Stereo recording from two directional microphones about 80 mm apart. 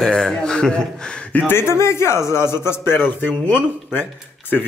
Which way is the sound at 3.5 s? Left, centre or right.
Centre.